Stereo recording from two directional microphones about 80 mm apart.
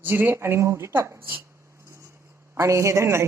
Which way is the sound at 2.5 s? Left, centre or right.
Right.